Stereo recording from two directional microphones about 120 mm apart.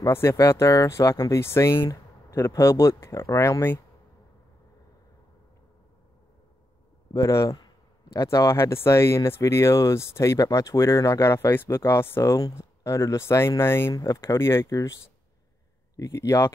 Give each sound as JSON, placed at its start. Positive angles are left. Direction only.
{"t": 0.0, "sound": "speech", "side_deg": 20}
{"t": 7.2, "sound": "speech", "side_deg": 25}
{"t": 7.5, "sound": "a sound", "side_deg": 30}
{"t": 8.8, "sound": "speech", "side_deg": 20}
{"t": 16.0, "sound": "speech", "side_deg": 25}